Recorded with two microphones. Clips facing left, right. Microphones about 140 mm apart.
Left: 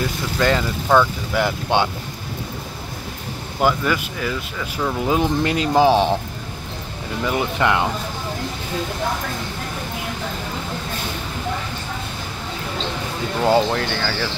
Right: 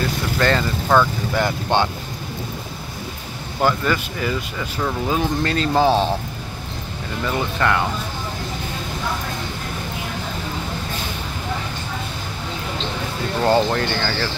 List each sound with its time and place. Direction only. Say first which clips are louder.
0.4 s speech: left 1 dB; 10° left (ahead or behind)
3.6 s speech: even; 5° left (ahead or behind)
5.0 s speech: left 3 dB; 20° left (ahead or behind)
7.2 s speech: left 1 dB; 15° left (ahead or behind)
13.4 s speech: even; 5° left (ahead or behind)